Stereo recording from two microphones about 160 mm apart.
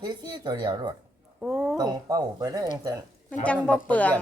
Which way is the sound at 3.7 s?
10° left (ahead or behind).